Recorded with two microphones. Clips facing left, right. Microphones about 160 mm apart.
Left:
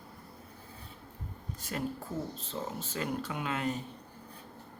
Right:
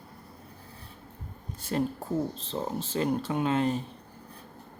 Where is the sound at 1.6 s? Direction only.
30° right (ahead or behind).